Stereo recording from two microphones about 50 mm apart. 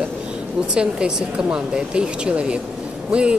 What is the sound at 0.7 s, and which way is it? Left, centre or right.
Speech, centre.